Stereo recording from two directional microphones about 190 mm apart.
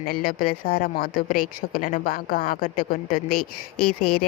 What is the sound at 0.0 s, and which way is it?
Speech, 50° left (ahead or behind).